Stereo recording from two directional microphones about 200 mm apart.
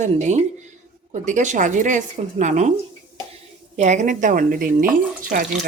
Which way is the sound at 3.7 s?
35° right (ahead or behind).